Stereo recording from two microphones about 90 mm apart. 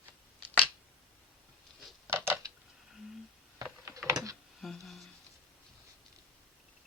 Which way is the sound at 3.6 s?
40° right (ahead or behind).